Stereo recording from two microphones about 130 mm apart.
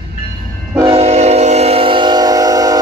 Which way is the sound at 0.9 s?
55° right (ahead or behind).